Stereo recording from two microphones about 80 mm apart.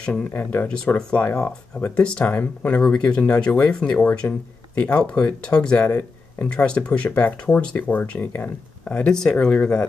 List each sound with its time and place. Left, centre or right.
0.0 s speech: centre
0.3 s speech: left
5.9 s speech: left
6.4 s speech: centre